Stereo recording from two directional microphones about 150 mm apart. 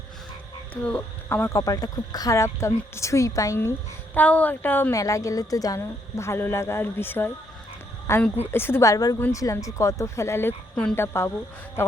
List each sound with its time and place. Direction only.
0.7 s a woman's voice: 10° left (ahead or behind)